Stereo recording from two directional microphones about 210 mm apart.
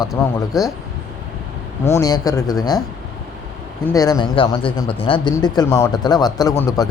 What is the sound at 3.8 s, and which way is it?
A man's voice, 15° left (ahead or behind).